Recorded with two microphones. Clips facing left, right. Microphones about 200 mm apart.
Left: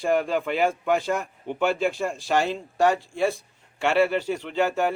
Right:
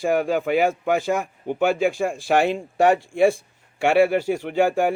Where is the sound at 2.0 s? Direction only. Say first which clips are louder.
Right 4 dB; 55° right (ahead or behind).